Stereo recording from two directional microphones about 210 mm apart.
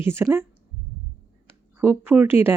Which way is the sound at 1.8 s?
10° right (ahead or behind).